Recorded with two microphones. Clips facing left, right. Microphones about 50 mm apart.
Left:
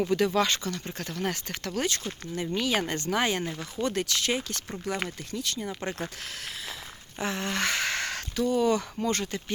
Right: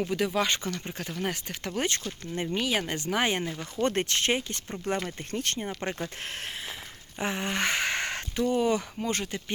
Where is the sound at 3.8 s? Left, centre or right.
Right.